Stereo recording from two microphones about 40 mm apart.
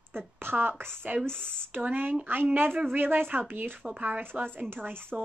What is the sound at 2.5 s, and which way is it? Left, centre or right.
Speech, right.